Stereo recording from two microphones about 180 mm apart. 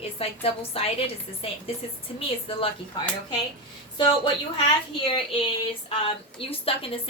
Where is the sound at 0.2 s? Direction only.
35° left (ahead or behind).